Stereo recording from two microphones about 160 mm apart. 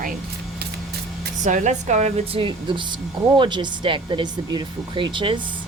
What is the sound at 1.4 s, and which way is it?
Speech, 50° right (ahead or behind).